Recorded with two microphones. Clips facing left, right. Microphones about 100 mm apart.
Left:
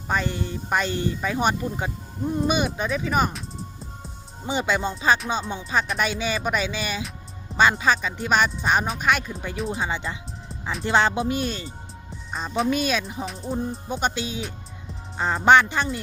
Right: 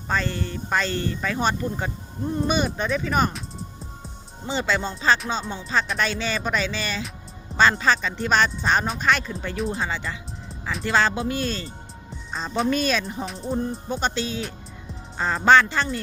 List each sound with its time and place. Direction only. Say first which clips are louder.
0.1 s speech: even; 15° left (ahead or behind)
4.4 s speech: left 1 dB; 15° left (ahead or behind)
9.8 s speech: left 1 dB; 20° left (ahead or behind)
10.5 s music: even; centre (ahead or behind)
10.8 s speech: left 1 dB; 20° left (ahead or behind)
12.1 s speech: even; 5° left (ahead or behind)
15.4 s speech: even; 15° left (ahead or behind)